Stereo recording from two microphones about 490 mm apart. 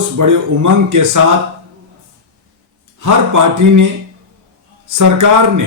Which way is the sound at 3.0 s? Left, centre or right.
Right.